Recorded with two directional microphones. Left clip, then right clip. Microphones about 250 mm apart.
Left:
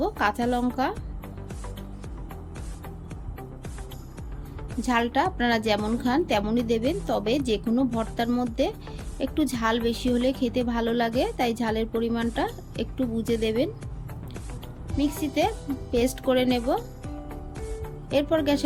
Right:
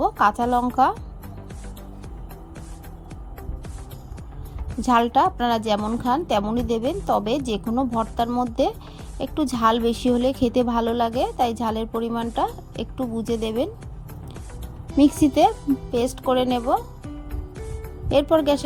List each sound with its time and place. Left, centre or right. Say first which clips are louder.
0.0 s speech: right 6 dB; right
4.8 s a woman's voice: right 6 dB; right
14.9 s a woman's voice: right 8 dB; right
18.1 s a woman's voice: right 5 dB; right